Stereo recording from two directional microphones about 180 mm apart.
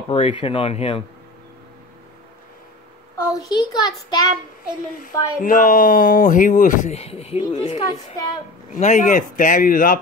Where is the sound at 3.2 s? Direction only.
20° left (ahead or behind).